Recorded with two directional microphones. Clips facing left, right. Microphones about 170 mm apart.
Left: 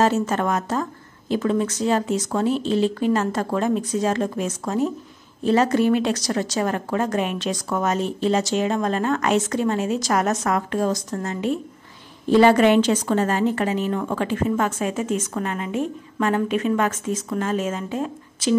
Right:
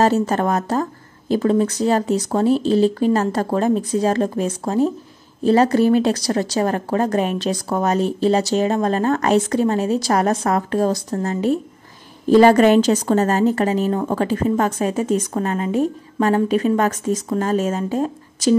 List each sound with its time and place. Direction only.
0.0 s a woman's voice: 35° right (ahead or behind)